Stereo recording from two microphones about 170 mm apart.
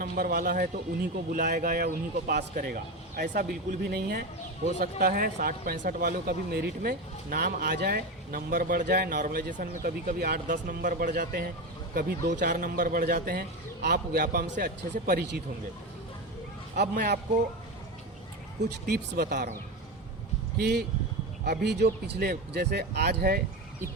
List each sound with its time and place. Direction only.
0.0 s speech: 55° right (ahead or behind)
4.6 s speech: 50° right (ahead or behind); by 14.7 s 75° right (ahead or behind)
14.9 s speech: 60° right (ahead or behind)
16.7 s speech: 70° right (ahead or behind)
18.9 s speech: 70° right (ahead or behind)
20.6 s speech: 70° right (ahead or behind)